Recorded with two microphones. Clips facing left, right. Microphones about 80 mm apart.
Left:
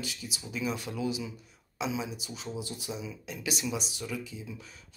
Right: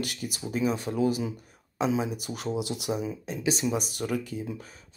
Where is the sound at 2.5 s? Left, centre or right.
Right.